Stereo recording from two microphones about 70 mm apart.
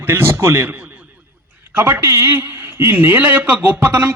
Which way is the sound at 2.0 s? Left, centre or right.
Right.